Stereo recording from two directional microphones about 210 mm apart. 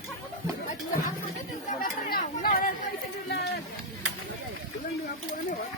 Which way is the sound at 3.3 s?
50° left (ahead or behind).